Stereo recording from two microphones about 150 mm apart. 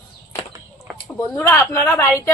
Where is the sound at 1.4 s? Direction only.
15° left (ahead or behind).